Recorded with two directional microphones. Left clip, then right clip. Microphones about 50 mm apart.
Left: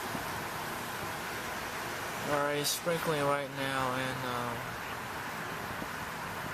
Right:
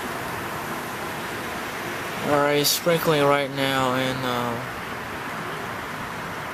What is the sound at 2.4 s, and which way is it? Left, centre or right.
Speech, right.